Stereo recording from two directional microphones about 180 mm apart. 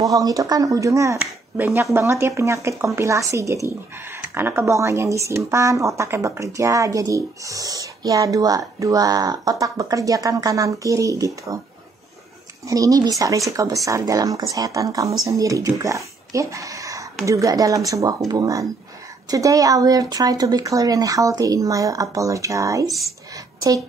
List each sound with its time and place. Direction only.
0.0 s speech: 20° right (ahead or behind)
12.6 s speech: 20° right (ahead or behind)
23.3 s a sound: 20° right (ahead or behind)